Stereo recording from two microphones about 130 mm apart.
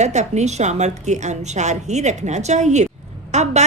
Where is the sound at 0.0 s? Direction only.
60° right (ahead or behind).